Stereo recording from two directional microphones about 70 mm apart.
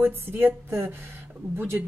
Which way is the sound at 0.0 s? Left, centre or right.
Right.